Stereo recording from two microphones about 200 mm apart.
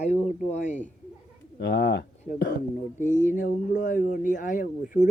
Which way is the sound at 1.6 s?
60° left (ahead or behind).